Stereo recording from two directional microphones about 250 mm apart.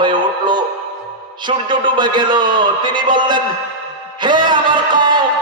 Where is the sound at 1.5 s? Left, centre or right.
Centre.